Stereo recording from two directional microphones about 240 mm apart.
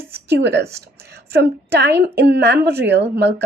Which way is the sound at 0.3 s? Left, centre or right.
Right.